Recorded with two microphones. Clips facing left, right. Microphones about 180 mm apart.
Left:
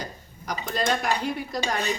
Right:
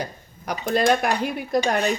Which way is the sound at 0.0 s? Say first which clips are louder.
Right 5 dB; 60° right (ahead or behind).